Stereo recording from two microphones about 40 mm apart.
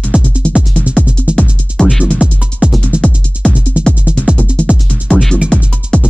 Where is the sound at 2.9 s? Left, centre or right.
Right.